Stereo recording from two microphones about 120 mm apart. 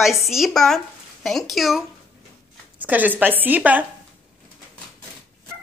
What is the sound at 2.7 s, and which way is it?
Speech, 15° right (ahead or behind).